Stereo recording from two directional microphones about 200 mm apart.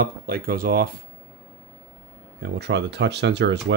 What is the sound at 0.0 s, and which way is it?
Speech, 50° right (ahead or behind).